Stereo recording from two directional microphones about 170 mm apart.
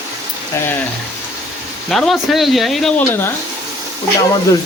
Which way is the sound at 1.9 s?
Centre (ahead or behind).